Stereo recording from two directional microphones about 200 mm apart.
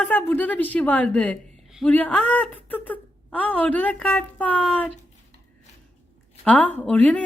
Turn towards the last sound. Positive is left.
turn(degrees=5)  # may be behind; listen again after turning